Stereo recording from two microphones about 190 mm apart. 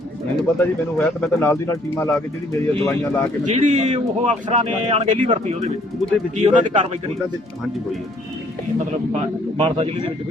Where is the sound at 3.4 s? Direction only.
40° right (ahead or behind).